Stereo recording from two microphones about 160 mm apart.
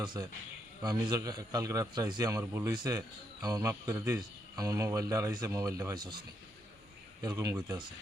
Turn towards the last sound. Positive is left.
turn(degrees=-20)  # may be behind; listen again after turning